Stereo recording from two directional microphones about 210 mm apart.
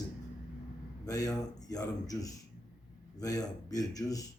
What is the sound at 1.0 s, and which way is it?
Speech, 15° left (ahead or behind).